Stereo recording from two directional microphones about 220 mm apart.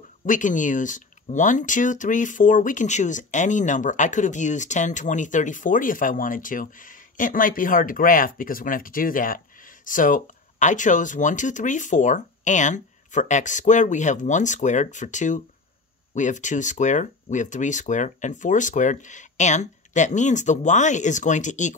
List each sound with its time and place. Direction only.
0.3 s speech: 35° left (ahead or behind)